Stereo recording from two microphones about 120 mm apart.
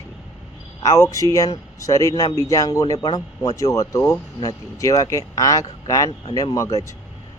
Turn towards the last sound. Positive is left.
turn(degrees=30)  # may be behind; listen again after turning